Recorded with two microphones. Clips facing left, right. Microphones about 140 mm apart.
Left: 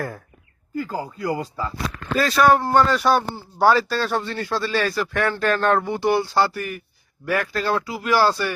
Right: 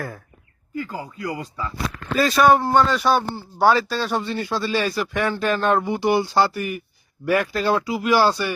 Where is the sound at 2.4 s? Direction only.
10° right (ahead or behind).